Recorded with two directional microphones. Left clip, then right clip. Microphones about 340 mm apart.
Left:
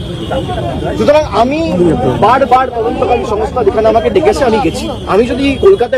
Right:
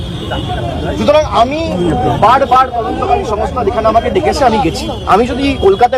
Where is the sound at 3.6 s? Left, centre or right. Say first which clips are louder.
Left 2 dB; centre.